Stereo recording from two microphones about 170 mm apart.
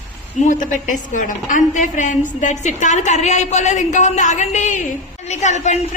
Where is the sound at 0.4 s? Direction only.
50° left (ahead or behind).